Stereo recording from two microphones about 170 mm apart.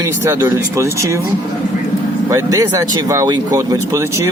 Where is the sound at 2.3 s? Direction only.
20° right (ahead or behind).